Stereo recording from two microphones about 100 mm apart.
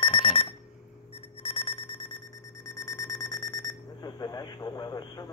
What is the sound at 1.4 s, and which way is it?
Alarm clock, 85° left.